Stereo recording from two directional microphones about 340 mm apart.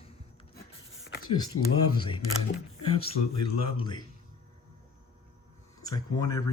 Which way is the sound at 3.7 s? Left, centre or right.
Centre.